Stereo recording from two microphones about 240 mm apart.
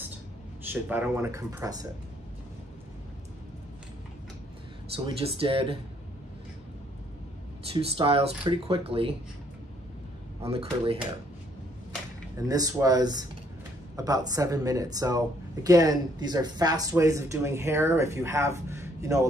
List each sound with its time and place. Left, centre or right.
0.7 s speech: centre
4.9 s speech: right
7.7 s speech: right
10.4 s speech: right
12.4 s speech: centre